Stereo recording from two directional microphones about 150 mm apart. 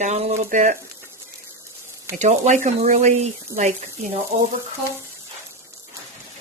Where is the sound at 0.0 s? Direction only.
50° right (ahead or behind).